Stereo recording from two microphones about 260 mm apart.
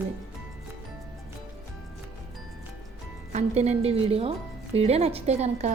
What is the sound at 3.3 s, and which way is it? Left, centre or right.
A woman's voice, right.